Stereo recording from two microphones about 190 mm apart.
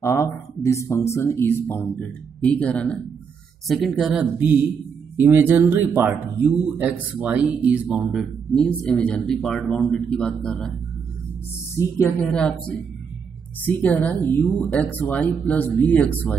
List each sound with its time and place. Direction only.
0.0 s speech: 15° left (ahead or behind)
11.7 s speech: 15° left (ahead or behind)